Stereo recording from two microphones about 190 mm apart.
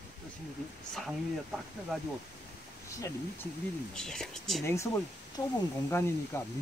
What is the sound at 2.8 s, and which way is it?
Speech, 15° left (ahead or behind).